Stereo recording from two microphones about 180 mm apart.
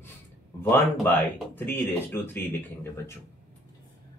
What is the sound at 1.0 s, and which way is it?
Speech, 10° left (ahead or behind).